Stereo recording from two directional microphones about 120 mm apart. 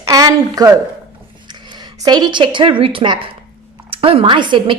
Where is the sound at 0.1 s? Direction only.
30° right (ahead or behind).